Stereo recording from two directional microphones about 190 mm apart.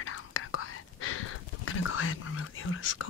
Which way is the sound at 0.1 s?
90° left.